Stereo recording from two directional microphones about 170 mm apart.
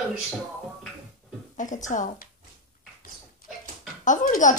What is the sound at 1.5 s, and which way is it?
Speech, 50° left (ahead or behind).